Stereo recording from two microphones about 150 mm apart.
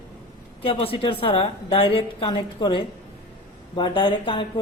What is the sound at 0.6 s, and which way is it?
Mantra, 35° left (ahead or behind).